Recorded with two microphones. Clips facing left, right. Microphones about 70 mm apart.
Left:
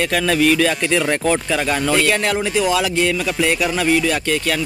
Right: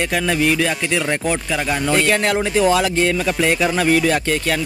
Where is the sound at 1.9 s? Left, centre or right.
Right.